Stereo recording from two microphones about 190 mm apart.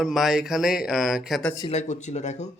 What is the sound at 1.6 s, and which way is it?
Speech, 35° left (ahead or behind).